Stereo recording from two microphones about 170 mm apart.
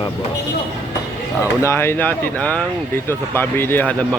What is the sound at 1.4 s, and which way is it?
Speech, 15° left (ahead or behind).